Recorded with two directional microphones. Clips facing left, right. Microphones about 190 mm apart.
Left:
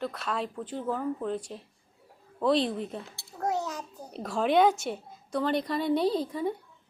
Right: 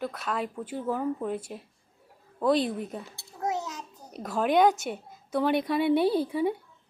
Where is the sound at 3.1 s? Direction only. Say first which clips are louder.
Left 1 dB; 20° right (ahead or behind).